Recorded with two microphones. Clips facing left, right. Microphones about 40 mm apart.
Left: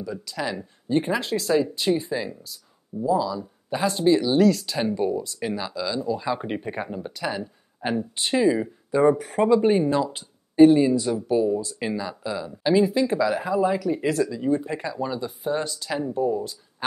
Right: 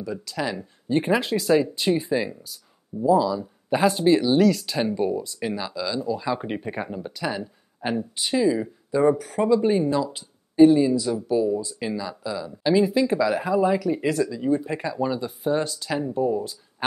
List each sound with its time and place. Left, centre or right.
0.4 s speech: centre
8.1 s speech: centre